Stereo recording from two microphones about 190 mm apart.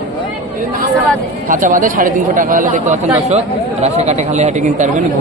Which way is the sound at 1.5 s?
45° right (ahead or behind).